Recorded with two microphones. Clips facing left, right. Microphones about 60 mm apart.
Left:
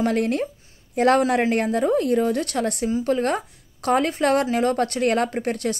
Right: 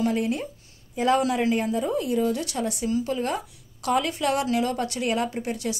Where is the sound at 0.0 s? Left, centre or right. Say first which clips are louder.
Left 3 dB; left.